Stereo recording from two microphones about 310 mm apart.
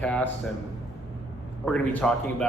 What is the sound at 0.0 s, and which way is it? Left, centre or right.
Speech, centre.